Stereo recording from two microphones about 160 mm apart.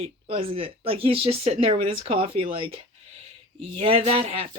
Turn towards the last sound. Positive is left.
turn(degrees=-35)  # may be behind; listen again after turning